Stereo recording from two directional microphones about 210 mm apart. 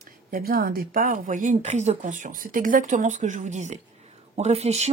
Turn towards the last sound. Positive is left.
turn(degrees=-30)  # may be behind; listen again after turning